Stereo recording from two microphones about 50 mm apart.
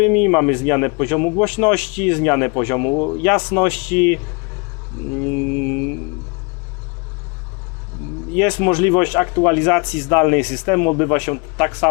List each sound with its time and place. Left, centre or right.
0.0 s speech: left
2.9 s speech: left
3.2 s speech: left
8.3 s speech: left
10.1 s speech: left
10.4 s speech: centre
10.7 s speech: left